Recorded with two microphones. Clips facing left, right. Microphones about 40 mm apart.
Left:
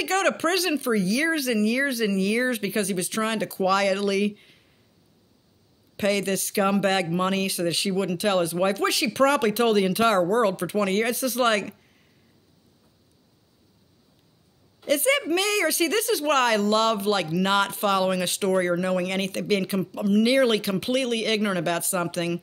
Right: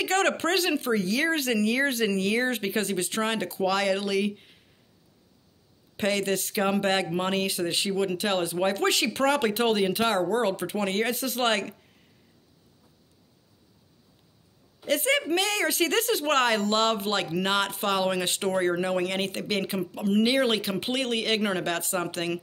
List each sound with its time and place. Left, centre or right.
0.0 s speech: right
3.6 s speech: centre
5.9 s speech: centre
8.8 s speech: right
9.9 s speech: centre
14.9 s speech: centre
15.7 s speech: right
17.5 s speech: centre
18.1 s speech: right
19.0 s speech: centre
19.9 s speech: right
20.2 s speech: centre